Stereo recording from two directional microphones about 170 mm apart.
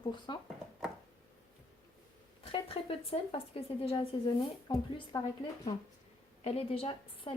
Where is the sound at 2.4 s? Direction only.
35° left (ahead or behind).